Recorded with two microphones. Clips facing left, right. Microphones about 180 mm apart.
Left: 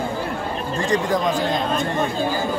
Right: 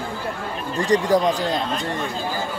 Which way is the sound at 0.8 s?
35° right (ahead or behind).